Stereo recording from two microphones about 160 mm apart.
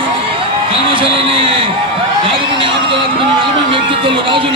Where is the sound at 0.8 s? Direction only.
35° right (ahead or behind).